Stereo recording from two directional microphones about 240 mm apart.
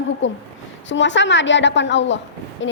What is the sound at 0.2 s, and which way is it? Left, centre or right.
A woman's voice, left.